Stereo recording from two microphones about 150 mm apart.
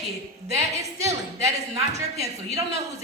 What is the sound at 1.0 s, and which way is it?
A woman's voice, 20° right (ahead or behind).